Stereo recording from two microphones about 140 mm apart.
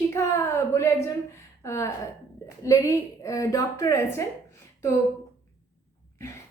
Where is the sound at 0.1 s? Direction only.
20° left (ahead or behind).